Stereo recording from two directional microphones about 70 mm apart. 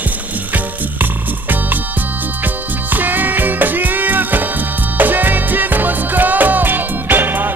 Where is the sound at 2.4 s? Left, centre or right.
Right.